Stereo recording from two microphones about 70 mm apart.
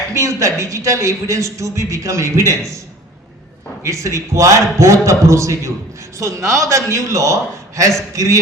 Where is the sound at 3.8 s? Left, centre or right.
Right.